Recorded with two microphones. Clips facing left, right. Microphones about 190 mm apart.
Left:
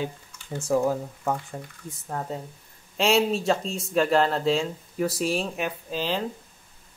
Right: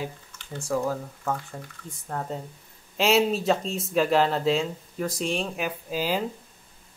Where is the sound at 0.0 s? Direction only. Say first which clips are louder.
Left 3 dB; 25° left (ahead or behind).